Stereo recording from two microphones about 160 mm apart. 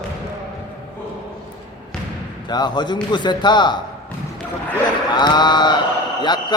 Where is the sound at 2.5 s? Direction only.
25° left (ahead or behind).